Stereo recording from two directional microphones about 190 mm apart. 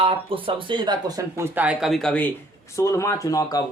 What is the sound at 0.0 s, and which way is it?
Speech, 30° right (ahead or behind).